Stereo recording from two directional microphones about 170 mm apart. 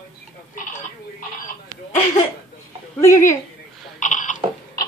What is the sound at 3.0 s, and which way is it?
Speech, 15° left (ahead or behind).